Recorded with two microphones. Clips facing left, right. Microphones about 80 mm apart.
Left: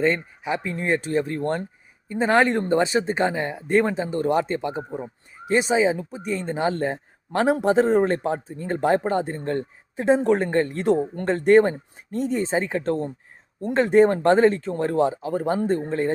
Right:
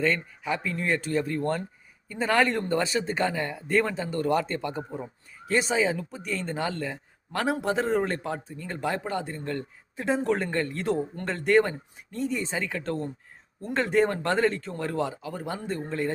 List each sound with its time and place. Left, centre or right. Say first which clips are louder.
0.0 s speech: left 4 dB; left
6.7 s a man's voice: left 8 dB; left